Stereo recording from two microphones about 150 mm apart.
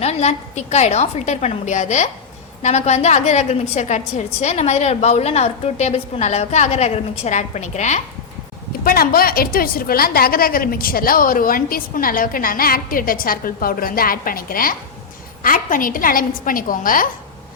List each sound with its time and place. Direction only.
0.0 s a woman's voice: 45° left (ahead or behind)
8.8 s a woman's voice: 75° left (ahead or behind)